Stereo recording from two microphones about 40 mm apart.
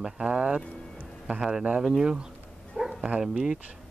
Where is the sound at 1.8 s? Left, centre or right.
Centre.